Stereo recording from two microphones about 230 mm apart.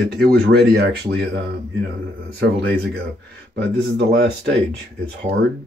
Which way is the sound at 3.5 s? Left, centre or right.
Right.